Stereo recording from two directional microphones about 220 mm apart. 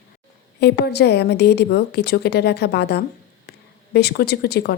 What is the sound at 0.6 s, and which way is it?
A woman's voice, 50° left (ahead or behind).